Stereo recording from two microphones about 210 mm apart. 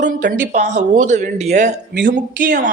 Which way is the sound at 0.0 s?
40° right (ahead or behind).